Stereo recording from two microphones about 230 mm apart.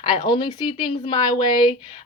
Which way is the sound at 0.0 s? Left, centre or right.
Left.